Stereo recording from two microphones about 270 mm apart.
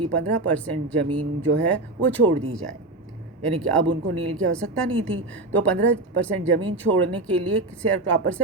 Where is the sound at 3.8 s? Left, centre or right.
Right.